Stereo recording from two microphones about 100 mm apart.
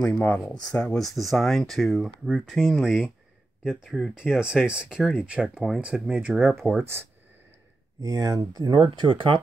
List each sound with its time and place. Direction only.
0.0 s speech: 10° left (ahead or behind); by 6.5 s 5° right (ahead or behind)
6.8 s speech: 25° right (ahead or behind)
8.0 s speech: 40° right (ahead or behind)
9.0 s speech: 60° right (ahead or behind)